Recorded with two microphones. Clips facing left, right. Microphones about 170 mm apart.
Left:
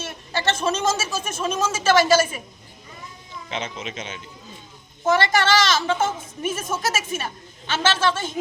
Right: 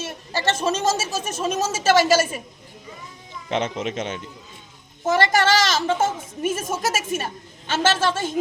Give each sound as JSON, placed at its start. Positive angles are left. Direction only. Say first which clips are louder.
{"t": 0.0, "sound": "a woman's voice", "louder": "right 1 dB", "side_deg": -40}
{"t": 3.5, "sound": "speech", "louder": "right 7 dB", "side_deg": -60}
{"t": 5.0, "sound": "a woman's voice", "louder": "right 1 dB", "side_deg": -40}